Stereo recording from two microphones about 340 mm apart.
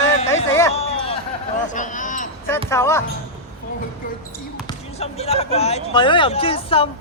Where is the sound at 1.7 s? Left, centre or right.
Left.